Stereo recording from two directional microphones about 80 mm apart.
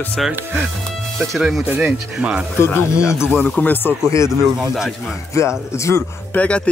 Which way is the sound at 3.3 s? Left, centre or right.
Left.